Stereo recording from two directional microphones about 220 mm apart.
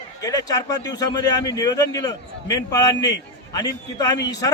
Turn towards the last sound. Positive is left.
turn(degrees=15)  # may be behind; listen again after turning